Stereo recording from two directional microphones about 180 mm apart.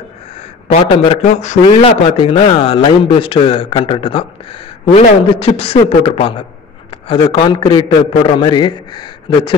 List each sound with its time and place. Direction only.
0.7 s a man's voice: 30° left (ahead or behind)